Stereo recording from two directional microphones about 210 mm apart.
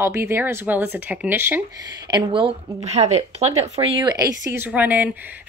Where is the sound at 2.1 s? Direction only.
25° right (ahead or behind); by 5.1 s 10° right (ahead or behind).